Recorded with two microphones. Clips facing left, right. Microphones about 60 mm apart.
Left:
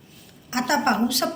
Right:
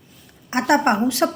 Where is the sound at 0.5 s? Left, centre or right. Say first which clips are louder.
Right 4 dB; right.